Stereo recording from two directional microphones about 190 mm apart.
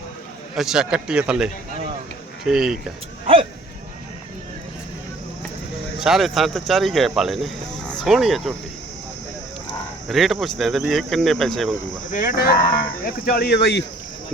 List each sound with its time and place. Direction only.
0.5 s speech: 5° right (ahead or behind)
6.0 s speech: centre (ahead or behind)
10.1 s speech: centre (ahead or behind)
12.1 s speech: 45° left (ahead or behind)